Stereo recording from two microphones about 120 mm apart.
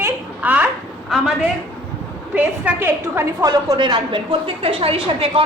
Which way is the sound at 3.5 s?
35° right (ahead or behind).